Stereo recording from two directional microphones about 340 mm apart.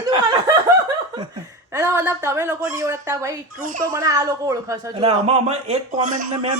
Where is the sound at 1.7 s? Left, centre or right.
Centre.